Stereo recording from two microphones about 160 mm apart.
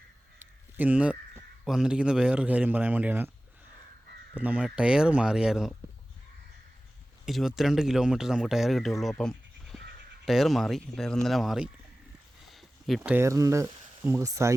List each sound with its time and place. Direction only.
0.8 s speech: 10° right (ahead or behind)
4.4 s speech: 10° right (ahead or behind)
7.3 s speech: centre (ahead or behind)
9.7 s a sound: centre (ahead or behind)
10.2 s speech: centre (ahead or behind)
12.5 s a sound: centre (ahead or behind)
13.0 s speech: 15° right (ahead or behind)